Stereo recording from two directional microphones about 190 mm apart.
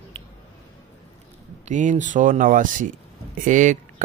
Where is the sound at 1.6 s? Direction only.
40° right (ahead or behind).